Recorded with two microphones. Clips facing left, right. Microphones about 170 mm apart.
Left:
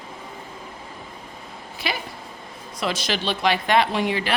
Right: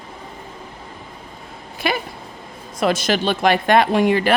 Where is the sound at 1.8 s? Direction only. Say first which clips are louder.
Right 7 dB; 50° right (ahead or behind).